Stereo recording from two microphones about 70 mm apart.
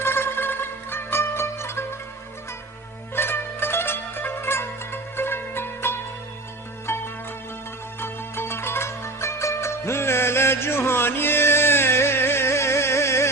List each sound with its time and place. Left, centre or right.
0.0 s zither: left
3.2 s zither: left
6.8 s music: left